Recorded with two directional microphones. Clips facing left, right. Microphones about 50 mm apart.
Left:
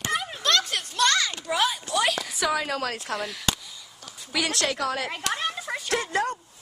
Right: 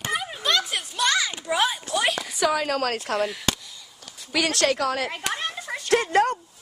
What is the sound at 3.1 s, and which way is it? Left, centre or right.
Speech, centre.